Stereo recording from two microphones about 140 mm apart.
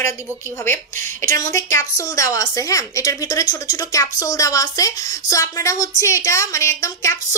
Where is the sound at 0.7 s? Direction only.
20° left (ahead or behind).